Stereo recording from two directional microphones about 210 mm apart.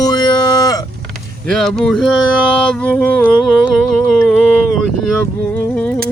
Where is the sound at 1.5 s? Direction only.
Centre (ahead or behind).